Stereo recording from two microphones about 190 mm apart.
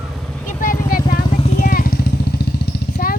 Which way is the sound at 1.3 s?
35° left (ahead or behind).